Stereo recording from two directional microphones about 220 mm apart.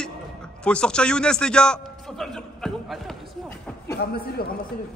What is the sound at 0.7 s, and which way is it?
A man's voice, 5° left (ahead or behind).